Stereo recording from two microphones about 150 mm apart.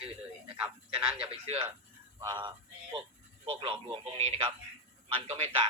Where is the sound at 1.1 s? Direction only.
40° right (ahead or behind).